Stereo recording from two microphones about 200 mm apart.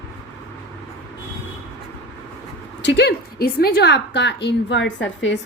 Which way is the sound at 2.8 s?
55° left (ahead or behind).